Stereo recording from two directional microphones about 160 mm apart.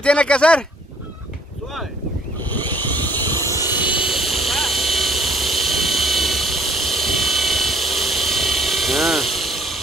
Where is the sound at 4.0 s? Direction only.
Centre (ahead or behind).